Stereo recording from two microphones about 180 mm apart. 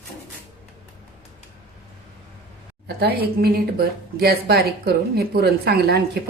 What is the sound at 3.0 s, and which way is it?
A woman's voice, 60° right (ahead or behind).